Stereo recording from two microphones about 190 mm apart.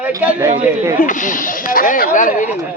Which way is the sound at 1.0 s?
45° left (ahead or behind).